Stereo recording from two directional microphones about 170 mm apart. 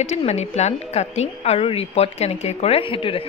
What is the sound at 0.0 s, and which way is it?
A woman's voice, 40° left (ahead or behind).